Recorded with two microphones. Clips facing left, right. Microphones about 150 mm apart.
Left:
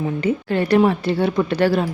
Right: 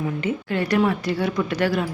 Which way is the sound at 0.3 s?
30° left (ahead or behind).